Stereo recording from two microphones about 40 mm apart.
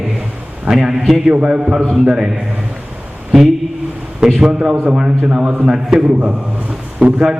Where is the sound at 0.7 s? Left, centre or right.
Centre.